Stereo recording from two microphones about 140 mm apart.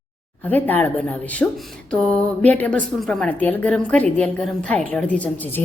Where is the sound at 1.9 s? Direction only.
5° left (ahead or behind).